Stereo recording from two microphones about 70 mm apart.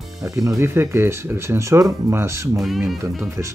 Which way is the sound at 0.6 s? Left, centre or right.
Right.